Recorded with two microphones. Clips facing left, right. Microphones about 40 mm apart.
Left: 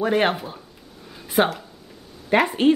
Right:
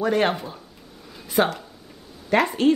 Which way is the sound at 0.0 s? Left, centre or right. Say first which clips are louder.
Left 1 dB; centre.